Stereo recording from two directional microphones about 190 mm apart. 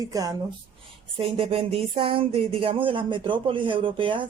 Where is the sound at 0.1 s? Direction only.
20° right (ahead or behind).